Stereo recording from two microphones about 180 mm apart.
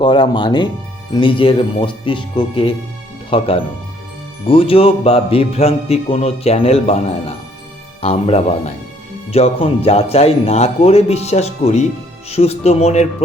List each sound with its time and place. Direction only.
0.0 s a man's voice: 25° left (ahead or behind)